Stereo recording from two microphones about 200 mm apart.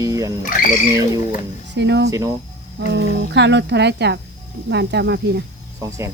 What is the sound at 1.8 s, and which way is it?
Speech, 60° right (ahead or behind).